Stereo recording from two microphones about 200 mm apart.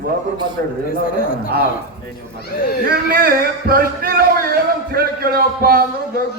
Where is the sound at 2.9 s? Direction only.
50° right (ahead or behind).